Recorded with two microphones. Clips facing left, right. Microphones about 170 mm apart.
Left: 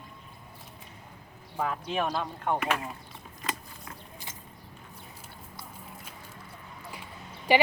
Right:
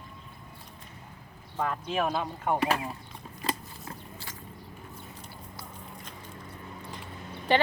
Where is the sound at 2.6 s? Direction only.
35° right (ahead or behind).